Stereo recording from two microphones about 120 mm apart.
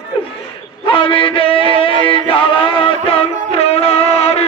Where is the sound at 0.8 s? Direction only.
45° left (ahead or behind).